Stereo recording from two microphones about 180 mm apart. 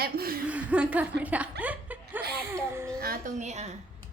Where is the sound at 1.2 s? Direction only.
10° right (ahead or behind).